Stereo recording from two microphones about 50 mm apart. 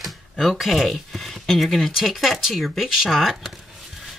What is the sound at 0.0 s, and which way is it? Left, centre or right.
Speech, centre.